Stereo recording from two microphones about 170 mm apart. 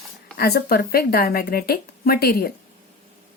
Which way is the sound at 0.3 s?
70° left (ahead or behind).